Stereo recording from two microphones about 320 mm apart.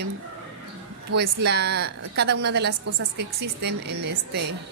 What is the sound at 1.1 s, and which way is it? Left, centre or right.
A woman's voice, right.